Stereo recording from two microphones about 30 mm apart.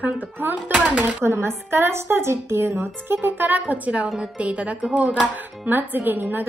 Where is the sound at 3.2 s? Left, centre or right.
Right.